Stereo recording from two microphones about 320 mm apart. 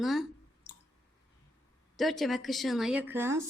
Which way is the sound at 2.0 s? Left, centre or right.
Centre.